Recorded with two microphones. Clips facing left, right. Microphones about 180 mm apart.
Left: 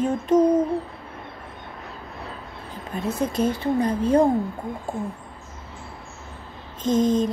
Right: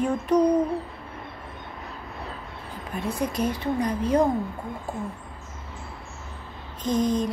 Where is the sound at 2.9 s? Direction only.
25° left (ahead or behind).